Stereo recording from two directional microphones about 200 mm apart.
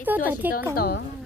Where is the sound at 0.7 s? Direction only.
50° left (ahead or behind).